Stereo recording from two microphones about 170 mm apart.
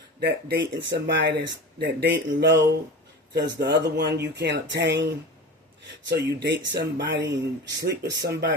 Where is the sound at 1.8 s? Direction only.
75° right (ahead or behind); by 2.6 s 90° right.